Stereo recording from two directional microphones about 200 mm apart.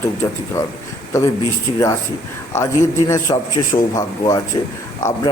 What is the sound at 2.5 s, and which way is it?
A man's voice, 15° left (ahead or behind).